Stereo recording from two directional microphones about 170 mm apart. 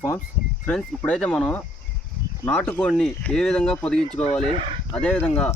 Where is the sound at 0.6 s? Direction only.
5° left (ahead or behind).